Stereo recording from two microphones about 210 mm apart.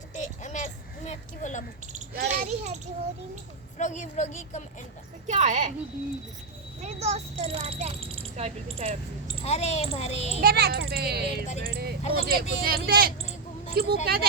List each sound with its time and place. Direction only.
0.1 s a sound: 35° left (ahead or behind)
1.9 s a child's voice: 35° right (ahead or behind)
3.8 s a child's voice: 35° left (ahead or behind)
5.3 s a child's voice: 35° right (ahead or behind)
6.8 s a child's voice: 30° right (ahead or behind)
9.4 s a child's voice: 30° left (ahead or behind)
10.4 s speech: 50° right (ahead or behind)